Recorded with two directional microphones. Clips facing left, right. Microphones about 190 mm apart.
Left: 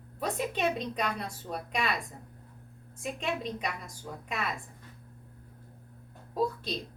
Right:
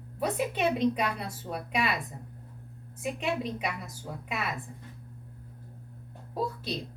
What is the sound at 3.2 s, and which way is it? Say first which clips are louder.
A woman's voice: right 2 dB; 5° right (ahead or behind).